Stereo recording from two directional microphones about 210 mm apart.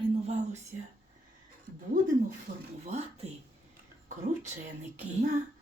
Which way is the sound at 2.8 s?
30° right (ahead or behind).